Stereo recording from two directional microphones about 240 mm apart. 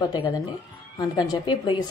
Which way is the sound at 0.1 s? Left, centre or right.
Centre.